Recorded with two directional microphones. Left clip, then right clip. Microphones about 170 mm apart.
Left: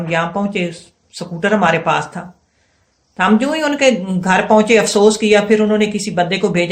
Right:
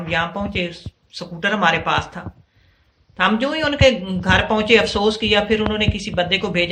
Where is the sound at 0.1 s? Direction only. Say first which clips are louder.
Left 3 dB; 55° left (ahead or behind).